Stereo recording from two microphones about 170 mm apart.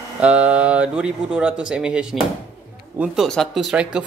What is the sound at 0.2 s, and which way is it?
Speech, 5° right (ahead or behind).